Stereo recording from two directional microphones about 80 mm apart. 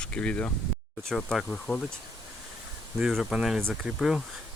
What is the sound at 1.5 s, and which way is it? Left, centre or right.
Speech, centre.